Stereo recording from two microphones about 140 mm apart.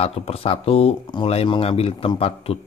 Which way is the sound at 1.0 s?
35° left (ahead or behind).